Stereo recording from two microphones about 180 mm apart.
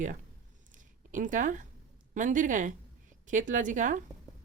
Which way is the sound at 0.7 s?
45° right (ahead or behind).